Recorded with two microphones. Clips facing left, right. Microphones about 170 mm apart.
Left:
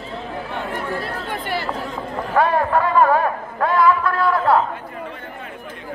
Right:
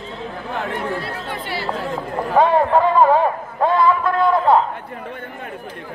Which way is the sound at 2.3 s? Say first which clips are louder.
Right 3 dB; 20° right (ahead or behind).